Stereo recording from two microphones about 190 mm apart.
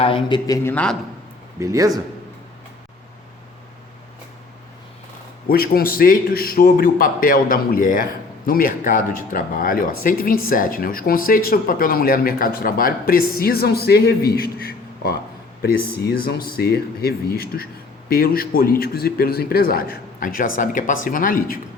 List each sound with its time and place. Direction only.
0.0 s a man's voice: 25° left (ahead or behind); by 0.9 s 10° left (ahead or behind)
1.5 s a man's voice: 15° right (ahead or behind)
5.5 s a man's voice: 50° left (ahead or behind)